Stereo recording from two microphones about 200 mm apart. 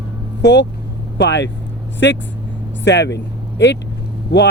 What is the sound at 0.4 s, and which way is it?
Speech, 60° left (ahead or behind).